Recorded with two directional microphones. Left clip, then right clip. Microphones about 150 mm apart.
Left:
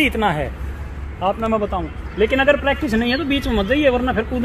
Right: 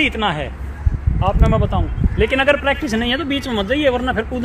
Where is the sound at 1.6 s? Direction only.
35° left (ahead or behind).